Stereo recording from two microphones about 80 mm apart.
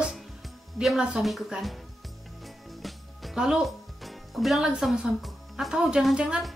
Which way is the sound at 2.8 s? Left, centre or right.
Centre.